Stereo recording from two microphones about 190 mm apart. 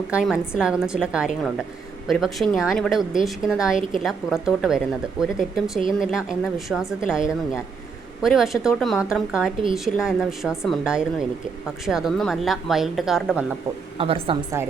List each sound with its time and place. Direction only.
0.1 s speech: 5° right (ahead or behind)
14.0 s a woman's voice: 30° right (ahead or behind)
14.6 s a woman's voice: 10° right (ahead or behind)